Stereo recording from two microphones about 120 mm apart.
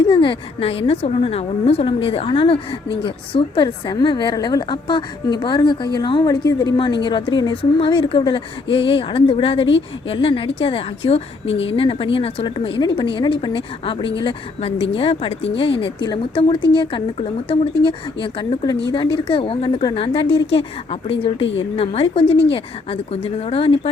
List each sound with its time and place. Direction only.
0.1 s a woman's voice: 45° left (ahead or behind)